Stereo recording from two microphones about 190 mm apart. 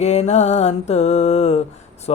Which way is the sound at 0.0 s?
35° left (ahead or behind).